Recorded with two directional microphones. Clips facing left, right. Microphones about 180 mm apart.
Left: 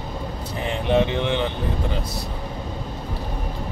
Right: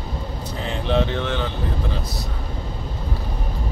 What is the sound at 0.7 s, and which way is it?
Speech, 15° left (ahead or behind).